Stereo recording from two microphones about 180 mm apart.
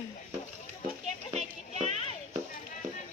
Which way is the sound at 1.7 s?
40° right (ahead or behind).